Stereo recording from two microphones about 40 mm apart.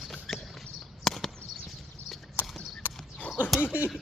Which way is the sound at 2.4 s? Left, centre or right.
Right.